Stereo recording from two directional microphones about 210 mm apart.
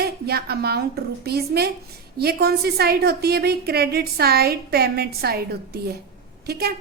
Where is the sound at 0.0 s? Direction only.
50° right (ahead or behind).